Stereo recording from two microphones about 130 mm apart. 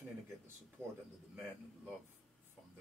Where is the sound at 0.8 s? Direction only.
20° right (ahead or behind).